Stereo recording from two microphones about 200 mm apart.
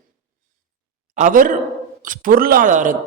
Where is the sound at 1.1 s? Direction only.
40° right (ahead or behind).